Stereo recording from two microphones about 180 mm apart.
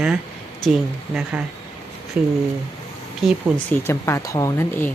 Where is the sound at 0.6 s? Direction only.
5° left (ahead or behind).